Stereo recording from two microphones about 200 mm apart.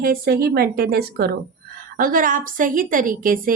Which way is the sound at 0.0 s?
50° right (ahead or behind).